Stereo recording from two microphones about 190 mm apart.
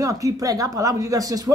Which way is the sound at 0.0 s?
15° right (ahead or behind).